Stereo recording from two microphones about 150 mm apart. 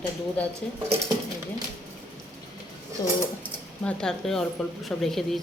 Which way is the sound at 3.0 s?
25° left (ahead or behind).